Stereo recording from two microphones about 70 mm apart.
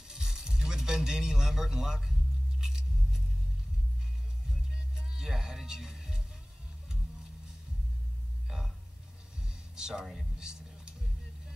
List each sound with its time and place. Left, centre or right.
0.1 s music: centre
2.6 s biting: centre
4.7 s music: centre
8.5 s a sound: centre
9.4 s music: centre